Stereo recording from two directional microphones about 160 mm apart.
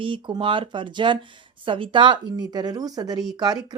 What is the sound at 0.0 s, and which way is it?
Speech, 30° right (ahead or behind).